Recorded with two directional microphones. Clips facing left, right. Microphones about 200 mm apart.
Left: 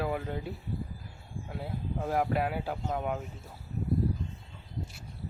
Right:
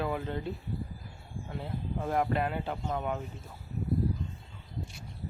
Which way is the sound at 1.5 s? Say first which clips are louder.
Even; 5° left (ahead or behind).